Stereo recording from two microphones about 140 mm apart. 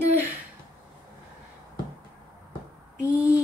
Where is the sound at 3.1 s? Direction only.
10° right (ahead or behind).